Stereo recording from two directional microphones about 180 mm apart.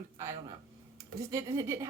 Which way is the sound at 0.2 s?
15° right (ahead or behind).